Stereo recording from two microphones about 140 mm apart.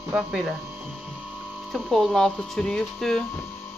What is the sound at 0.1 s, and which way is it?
Speech, 5° right (ahead or behind).